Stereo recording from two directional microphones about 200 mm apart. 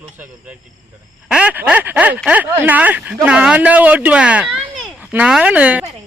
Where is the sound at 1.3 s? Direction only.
5° right (ahead or behind).